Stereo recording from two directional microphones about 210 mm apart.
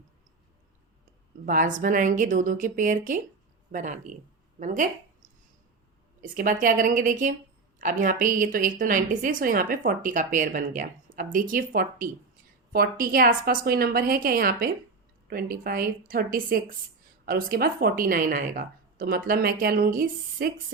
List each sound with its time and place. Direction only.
1.5 s a woman's voice: 40° right (ahead or behind)